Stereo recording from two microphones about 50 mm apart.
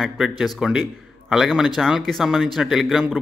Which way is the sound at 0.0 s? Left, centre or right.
Centre.